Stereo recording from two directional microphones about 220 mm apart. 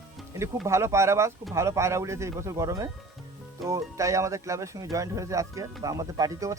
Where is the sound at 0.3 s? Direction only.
10° right (ahead or behind).